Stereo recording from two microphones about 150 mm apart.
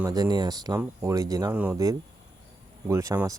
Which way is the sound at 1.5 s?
10° right (ahead or behind).